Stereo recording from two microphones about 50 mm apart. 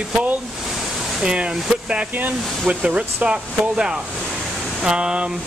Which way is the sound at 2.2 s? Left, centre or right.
Right.